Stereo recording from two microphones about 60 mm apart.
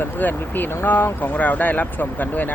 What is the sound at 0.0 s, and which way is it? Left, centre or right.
Speech, left.